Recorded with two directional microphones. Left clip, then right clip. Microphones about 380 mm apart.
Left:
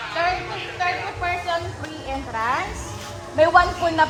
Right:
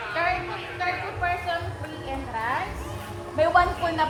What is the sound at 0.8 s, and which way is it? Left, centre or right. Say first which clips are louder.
Speech: left 3 dB; left.